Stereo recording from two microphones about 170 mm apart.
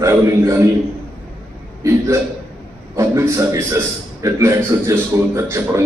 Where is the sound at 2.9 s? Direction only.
15° right (ahead or behind).